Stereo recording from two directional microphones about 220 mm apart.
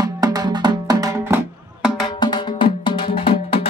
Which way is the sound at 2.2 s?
20° left (ahead or behind).